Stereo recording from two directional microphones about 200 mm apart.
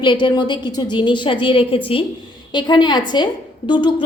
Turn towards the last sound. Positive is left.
turn(degrees=20)  # may be behind; listen again after turning